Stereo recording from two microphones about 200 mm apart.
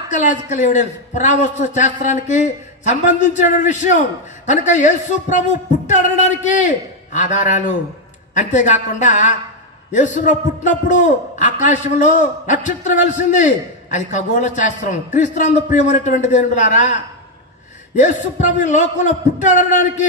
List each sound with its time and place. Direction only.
0.1 s a man's voice: 40° left (ahead or behind)